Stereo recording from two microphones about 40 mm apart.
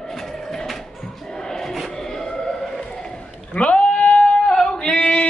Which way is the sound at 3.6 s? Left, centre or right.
Left.